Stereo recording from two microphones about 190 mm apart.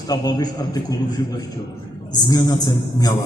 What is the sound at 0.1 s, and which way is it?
Speech, 20° left (ahead or behind).